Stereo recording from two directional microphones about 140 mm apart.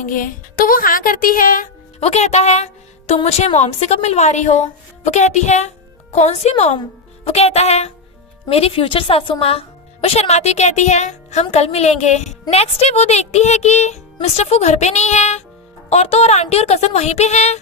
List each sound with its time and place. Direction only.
0.0 s a woman's voice: 75° left (ahead or behind)
2.0 s a woman's voice: 50° left (ahead or behind)